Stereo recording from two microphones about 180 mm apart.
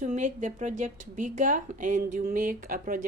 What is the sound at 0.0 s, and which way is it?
A woman's voice, 45° right (ahead or behind).